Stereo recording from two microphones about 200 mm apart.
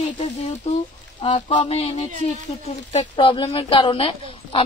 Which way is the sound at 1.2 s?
25° left (ahead or behind).